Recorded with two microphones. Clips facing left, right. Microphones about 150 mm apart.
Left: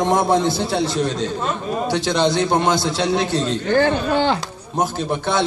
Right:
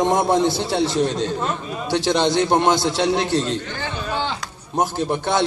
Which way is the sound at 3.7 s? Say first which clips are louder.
Left 11 dB; 60° left (ahead or behind).